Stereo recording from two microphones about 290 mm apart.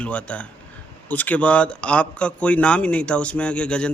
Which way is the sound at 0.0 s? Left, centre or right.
Centre.